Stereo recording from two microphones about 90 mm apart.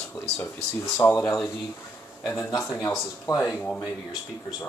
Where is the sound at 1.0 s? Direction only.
25° left (ahead or behind).